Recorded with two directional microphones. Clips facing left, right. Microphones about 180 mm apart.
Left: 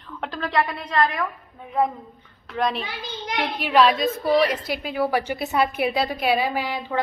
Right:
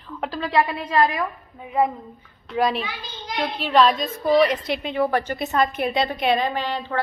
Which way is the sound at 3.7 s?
Centre (ahead or behind).